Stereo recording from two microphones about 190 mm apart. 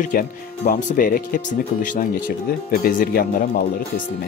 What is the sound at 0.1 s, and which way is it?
Speech, 45° left (ahead or behind).